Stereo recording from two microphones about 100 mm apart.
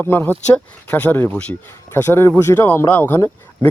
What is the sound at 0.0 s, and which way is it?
Speech, 20° left (ahead or behind).